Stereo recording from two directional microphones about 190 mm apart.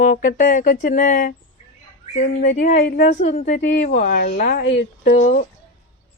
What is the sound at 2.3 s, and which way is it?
A woman's voice, 60° left (ahead or behind).